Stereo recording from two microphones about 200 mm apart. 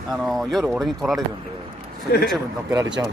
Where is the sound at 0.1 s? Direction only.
Centre (ahead or behind).